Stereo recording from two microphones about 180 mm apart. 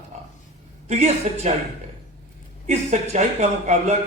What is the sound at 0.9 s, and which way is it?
Speech, 35° right (ahead or behind).